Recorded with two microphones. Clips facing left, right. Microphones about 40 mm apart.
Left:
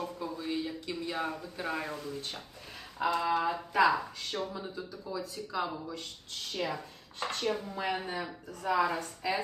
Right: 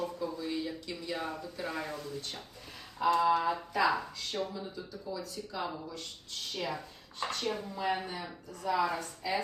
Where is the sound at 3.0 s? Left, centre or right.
Left.